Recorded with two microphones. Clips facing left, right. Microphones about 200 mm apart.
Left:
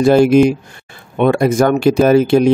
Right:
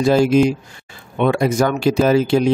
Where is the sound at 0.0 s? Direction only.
60° left (ahead or behind).